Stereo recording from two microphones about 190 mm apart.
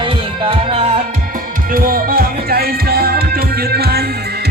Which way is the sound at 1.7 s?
50° right (ahead or behind).